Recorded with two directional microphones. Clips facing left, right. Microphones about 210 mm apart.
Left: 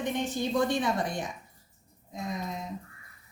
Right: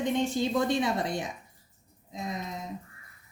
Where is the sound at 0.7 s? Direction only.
20° right (ahead or behind).